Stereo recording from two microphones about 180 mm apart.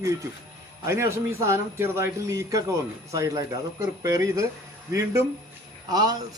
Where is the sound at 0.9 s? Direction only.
15° right (ahead or behind).